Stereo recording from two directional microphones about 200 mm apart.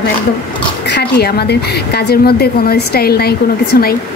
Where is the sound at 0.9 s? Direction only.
55° left (ahead or behind).